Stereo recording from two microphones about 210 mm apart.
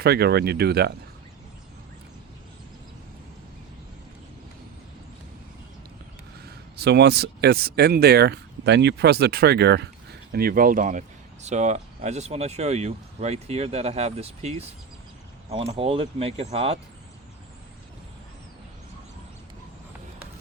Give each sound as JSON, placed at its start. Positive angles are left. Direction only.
{"t": 0.0, "sound": "speech", "side_deg": -50}
{"t": 6.4, "sound": "speech", "side_deg": -50}